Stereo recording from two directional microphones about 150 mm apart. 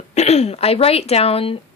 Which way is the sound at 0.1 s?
45° left (ahead or behind).